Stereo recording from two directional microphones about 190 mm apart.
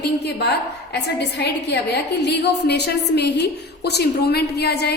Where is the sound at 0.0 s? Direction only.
60° left (ahead or behind).